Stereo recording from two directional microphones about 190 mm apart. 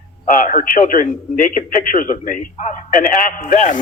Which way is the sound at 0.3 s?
45° left (ahead or behind).